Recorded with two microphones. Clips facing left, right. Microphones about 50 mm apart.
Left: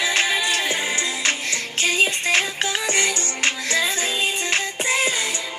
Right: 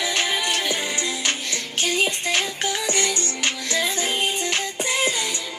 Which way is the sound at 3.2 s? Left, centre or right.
Left.